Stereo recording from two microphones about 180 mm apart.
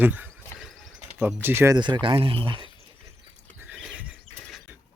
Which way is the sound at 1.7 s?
25° right (ahead or behind).